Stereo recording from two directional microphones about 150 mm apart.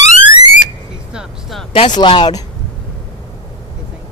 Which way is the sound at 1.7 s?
35° left (ahead or behind).